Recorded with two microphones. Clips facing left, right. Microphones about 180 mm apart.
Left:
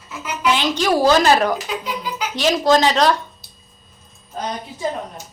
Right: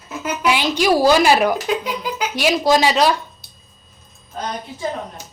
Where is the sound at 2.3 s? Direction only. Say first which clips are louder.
Left 1 dB; 10° right (ahead or behind).